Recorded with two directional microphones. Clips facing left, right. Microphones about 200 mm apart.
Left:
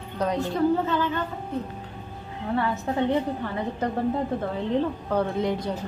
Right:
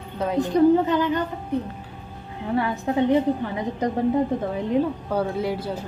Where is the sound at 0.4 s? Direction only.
15° right (ahead or behind).